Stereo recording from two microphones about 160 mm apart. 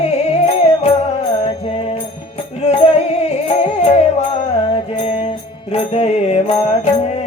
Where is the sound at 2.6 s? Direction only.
45° left (ahead or behind).